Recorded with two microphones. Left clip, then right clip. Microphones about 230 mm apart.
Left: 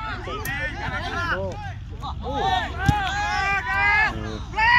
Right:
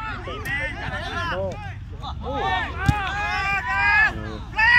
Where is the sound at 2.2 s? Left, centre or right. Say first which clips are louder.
Left 1 dB; left.